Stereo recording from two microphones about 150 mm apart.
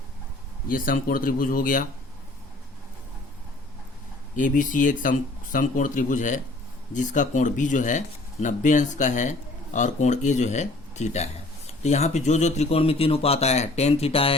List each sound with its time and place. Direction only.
0.7 s speech: 70° left (ahead or behind)
4.4 s speech: 65° left (ahead or behind); by 14.3 s 40° left (ahead or behind)